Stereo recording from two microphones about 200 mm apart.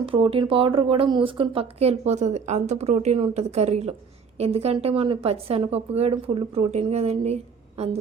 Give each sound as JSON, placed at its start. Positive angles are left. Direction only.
{"t": 0.0, "sound": "a woman's voice", "side_deg": -25}